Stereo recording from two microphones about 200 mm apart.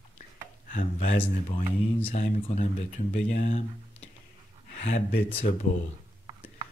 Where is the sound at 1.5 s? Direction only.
30° left (ahead or behind).